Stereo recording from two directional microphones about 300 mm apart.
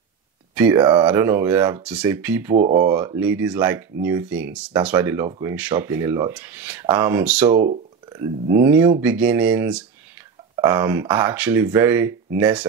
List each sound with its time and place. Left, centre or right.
0.6 s speech: centre
7.5 s speech: right
8.1 s speech: centre